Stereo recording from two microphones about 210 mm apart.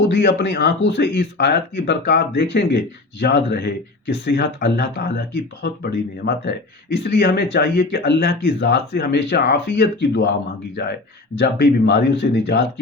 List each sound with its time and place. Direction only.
0.1 s speech: 55° left (ahead or behind)